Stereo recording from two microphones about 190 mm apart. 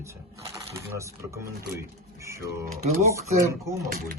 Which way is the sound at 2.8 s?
35° right (ahead or behind).